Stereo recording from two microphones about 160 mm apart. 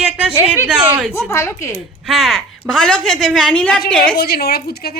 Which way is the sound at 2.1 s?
Centre (ahead or behind).